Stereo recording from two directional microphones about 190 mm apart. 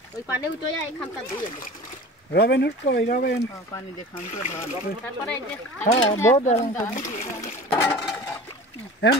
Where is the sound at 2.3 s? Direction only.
65° left (ahead or behind).